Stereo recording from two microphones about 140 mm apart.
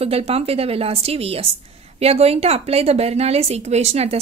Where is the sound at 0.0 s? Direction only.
45° right (ahead or behind).